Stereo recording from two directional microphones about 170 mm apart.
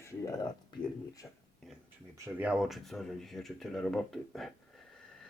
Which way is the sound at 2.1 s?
10° right (ahead or behind).